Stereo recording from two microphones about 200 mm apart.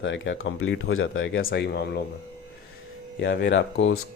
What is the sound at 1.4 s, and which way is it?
Speech, 55° left (ahead or behind).